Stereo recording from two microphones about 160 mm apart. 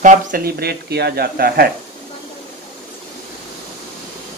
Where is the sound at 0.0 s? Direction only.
55° right (ahead or behind); by 1.7 s 75° right (ahead or behind).